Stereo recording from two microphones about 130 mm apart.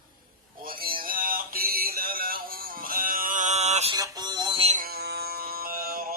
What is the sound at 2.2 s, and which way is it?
Music, 90° right.